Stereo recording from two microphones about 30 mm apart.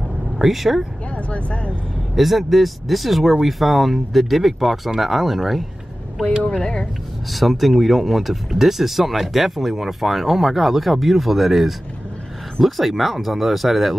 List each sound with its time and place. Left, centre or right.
0.4 s speech: centre
1.1 s speech: left
2.1 s speech: centre
6.4 s speech: left
7.3 s speech: centre